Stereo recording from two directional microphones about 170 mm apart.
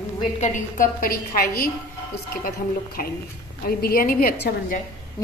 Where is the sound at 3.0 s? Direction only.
55° left (ahead or behind); by 4.5 s 70° left (ahead or behind).